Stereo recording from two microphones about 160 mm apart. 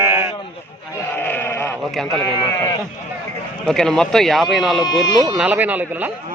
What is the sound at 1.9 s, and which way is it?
Speech, centre (ahead or behind).